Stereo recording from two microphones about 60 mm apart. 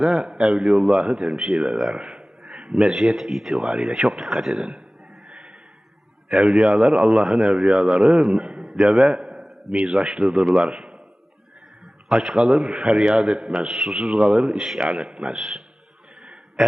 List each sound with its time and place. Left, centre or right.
0.0 s a man's voice: centre
0.9 s a man's voice: centre
6.2 s a man's voice: centre
7.0 s speech: centre
7.8 s a man's voice: centre
8.6 s a sound: centre
9.7 s a man's voice: centre
12.0 s a man's voice: centre
13.7 s a man's voice: centre